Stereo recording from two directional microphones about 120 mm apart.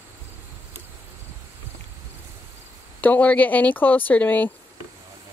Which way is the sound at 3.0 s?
15° left (ahead or behind).